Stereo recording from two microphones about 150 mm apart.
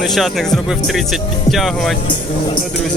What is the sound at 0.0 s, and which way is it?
Speech, centre (ahead or behind).